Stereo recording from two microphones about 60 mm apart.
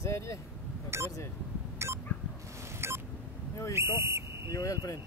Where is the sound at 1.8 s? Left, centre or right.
Right.